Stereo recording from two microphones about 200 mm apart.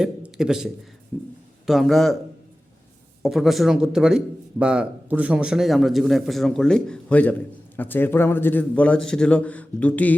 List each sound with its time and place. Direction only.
0.0 s a man's voice: centre (ahead or behind)
3.2 s a man's voice: centre (ahead or behind)